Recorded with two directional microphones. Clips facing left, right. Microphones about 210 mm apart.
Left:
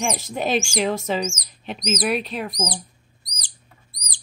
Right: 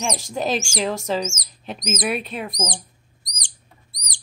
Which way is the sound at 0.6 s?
45° right (ahead or behind).